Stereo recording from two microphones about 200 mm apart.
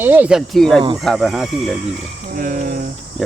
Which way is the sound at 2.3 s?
40° right (ahead or behind).